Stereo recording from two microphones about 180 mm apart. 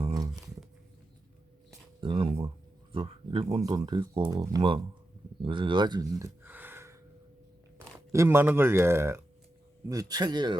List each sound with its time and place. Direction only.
0.0 s music: 20° right (ahead or behind)
2.0 s speech: 30° right (ahead or behind); by 6.9 s 10° right (ahead or behind)
8.1 s a man's voice: 15° right (ahead or behind)